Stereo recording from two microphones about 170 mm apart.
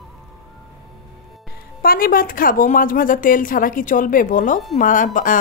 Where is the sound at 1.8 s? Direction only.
60° left (ahead or behind).